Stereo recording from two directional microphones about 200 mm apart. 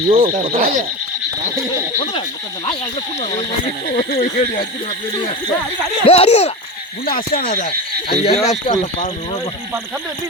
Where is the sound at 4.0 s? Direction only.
50° left (ahead or behind).